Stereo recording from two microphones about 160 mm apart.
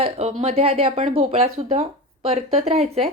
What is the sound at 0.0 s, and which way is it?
Speech, 40° right (ahead or behind).